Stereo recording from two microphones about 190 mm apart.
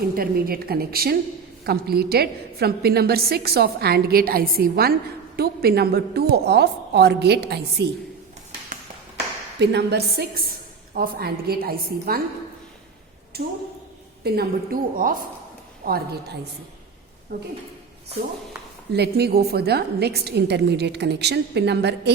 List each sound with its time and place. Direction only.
0.1 s a woman's voice: 50° right (ahead or behind)
9.6 s a woman's voice: 60° right (ahead or behind)
13.3 s a woman's voice: 55° right (ahead or behind)
18.9 s a woman's voice: 55° right (ahead or behind)